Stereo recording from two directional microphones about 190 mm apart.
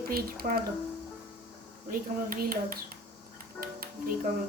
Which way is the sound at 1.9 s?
50° right (ahead or behind).